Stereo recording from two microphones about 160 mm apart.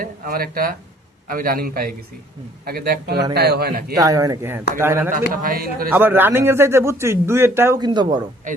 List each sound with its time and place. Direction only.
0.0 s a man's voice: 65° right (ahead or behind)
3.9 s a man's voice: 20° right (ahead or behind)
5.3 s speech: 60° right (ahead or behind)
5.9 s a man's voice: 15° right (ahead or behind)
7.8 s speech: 25° right (ahead or behind)